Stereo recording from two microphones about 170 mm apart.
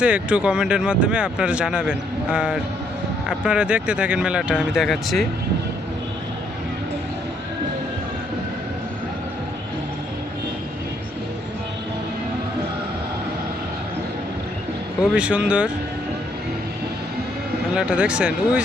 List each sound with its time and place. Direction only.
0.0 s speech: 5° right (ahead or behind)
15.1 s speech: 5° right (ahead or behind)
17.7 s speech: 5° right (ahead or behind)